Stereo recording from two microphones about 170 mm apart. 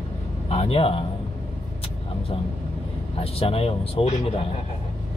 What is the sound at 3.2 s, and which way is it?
Speech, 35° left (ahead or behind).